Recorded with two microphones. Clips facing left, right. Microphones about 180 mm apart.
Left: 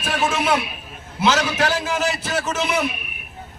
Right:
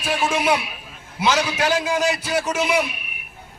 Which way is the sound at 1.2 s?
10° right (ahead or behind).